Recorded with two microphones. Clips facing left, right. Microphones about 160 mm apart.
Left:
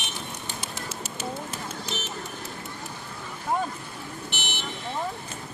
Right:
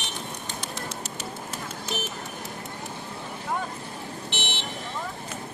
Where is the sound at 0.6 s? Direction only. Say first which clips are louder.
Right 1 dB; centre (ahead or behind).